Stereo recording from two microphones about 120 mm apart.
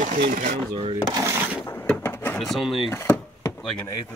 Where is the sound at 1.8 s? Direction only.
15° left (ahead or behind).